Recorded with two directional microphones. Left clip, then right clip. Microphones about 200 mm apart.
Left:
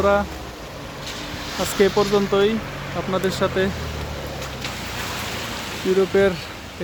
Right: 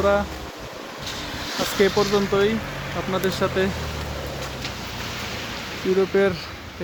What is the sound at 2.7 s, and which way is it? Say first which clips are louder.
Vehicle: left 1 dB; 50° right (ahead or behind).